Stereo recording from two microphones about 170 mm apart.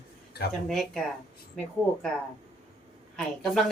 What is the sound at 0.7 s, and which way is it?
Speech, 5° left (ahead or behind).